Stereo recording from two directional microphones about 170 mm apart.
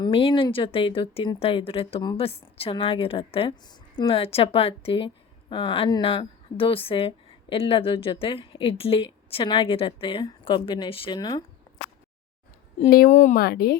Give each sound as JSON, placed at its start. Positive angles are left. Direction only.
{"t": 0.0, "sound": "a woman's voice", "side_deg": 30}
{"t": 12.9, "sound": "speech", "side_deg": 55}